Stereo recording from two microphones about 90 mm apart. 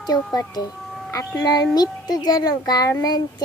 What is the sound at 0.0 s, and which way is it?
Speech, 45° left (ahead or behind).